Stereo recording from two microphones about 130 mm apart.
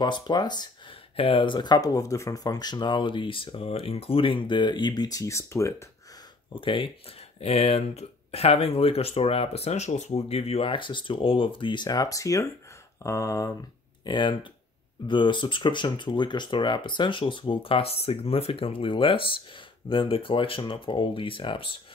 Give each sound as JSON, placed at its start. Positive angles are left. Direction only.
{"t": 0.0, "sound": "speech", "side_deg": 35}
{"t": 1.1, "sound": "speech", "side_deg": 45}
{"t": 6.5, "sound": "speech", "side_deg": 40}
{"t": 14.0, "sound": "speech", "side_deg": 35}